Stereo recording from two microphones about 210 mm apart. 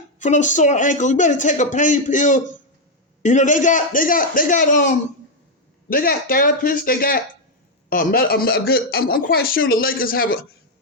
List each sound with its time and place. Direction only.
0.2 s speech: 35° left (ahead or behind)